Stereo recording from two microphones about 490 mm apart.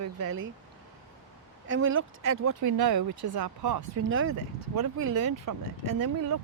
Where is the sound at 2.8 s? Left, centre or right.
Right.